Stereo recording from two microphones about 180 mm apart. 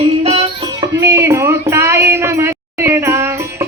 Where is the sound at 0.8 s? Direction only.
15° right (ahead or behind).